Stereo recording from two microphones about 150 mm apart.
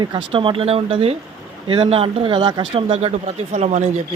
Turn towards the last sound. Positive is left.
turn(degrees=-50)  # may be behind; listen again after turning